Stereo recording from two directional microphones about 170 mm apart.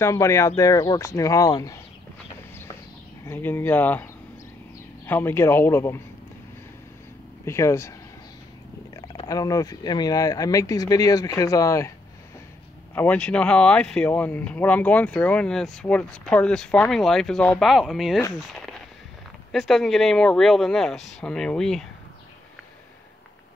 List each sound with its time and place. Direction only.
0.0 s speech: 15° left (ahead or behind)
3.3 s speech: 10° left (ahead or behind)
7.4 s speech: 15° left (ahead or behind)
8.9 s speech: 25° left (ahead or behind)
12.9 s speech: 10° left (ahead or behind)